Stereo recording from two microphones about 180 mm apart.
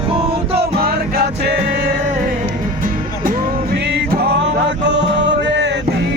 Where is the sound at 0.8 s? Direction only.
60° right (ahead or behind).